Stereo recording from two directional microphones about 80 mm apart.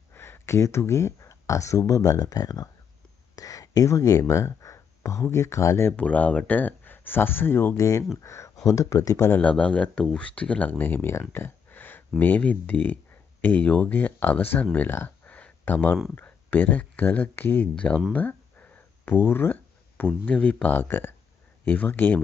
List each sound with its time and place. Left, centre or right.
0.1 s speech: left
5.9 s speech: centre; by 9.4 s left
9.4 s speech: centre